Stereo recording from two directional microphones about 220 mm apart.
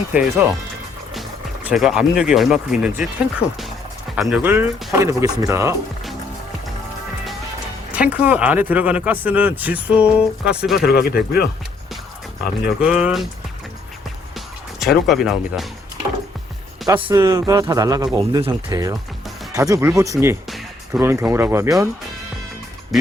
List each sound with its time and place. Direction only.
0.1 s speech: 5° right (ahead or behind)
1.6 s speech: centre (ahead or behind)
7.9 s speech: 5° right (ahead or behind)
10.8 s speech: 45° left (ahead or behind)
12.8 s speech: 5° right (ahead or behind)
14.3 s music: centre (ahead or behind)
16.8 s speech: 20° right (ahead or behind)